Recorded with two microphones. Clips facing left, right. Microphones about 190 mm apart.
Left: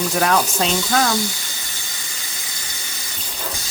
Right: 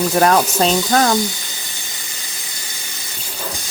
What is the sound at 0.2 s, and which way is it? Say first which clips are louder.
Speech: right 5 dB; 40° right (ahead or behind).